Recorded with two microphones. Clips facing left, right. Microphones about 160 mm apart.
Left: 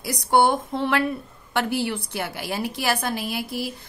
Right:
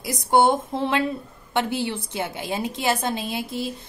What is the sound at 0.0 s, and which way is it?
A woman's voice, 20° right (ahead or behind).